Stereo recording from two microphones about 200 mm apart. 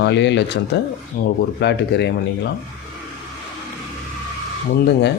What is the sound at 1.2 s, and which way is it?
Speech, 45° left (ahead or behind).